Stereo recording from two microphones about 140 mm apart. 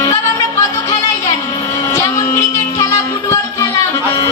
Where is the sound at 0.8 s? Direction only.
25° left (ahead or behind).